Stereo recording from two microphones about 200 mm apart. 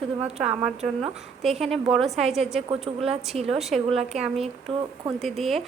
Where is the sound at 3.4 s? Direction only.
Centre (ahead or behind).